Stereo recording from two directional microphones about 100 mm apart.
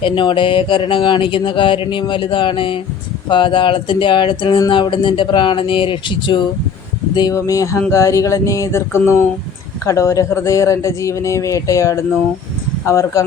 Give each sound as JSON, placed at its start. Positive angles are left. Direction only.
{"t": 0.0, "sound": "speech", "side_deg": 55}
{"t": 7.1, "sound": "speech", "side_deg": 45}
{"t": 7.3, "sound": "speech", "side_deg": 35}